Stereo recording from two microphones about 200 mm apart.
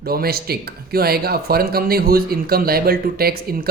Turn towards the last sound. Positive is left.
turn(degrees=-50)  # may be behind; listen again after turning